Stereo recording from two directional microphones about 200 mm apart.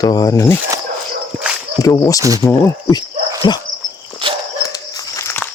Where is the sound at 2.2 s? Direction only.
15° right (ahead or behind).